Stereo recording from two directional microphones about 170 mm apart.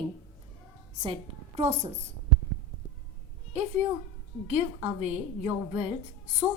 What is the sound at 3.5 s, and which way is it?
A woman's voice, 40° right (ahead or behind).